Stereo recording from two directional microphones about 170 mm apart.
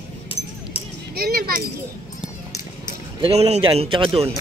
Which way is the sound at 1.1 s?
65° right (ahead or behind).